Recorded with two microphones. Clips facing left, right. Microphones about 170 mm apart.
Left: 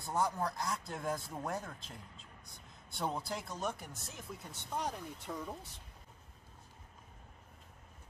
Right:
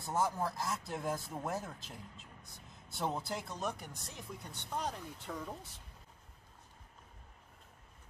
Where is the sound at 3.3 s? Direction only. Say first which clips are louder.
Even; centre (ahead or behind).